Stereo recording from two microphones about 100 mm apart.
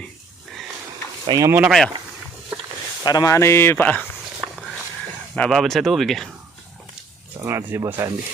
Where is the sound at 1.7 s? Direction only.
5° left (ahead or behind).